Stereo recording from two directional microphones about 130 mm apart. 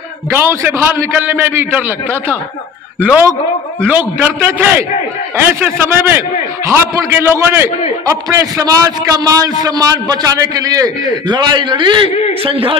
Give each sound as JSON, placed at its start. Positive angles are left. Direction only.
{"t": 0.3, "sound": "a man's voice", "side_deg": -20}